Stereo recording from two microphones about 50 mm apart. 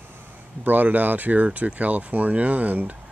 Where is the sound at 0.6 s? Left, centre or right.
Right.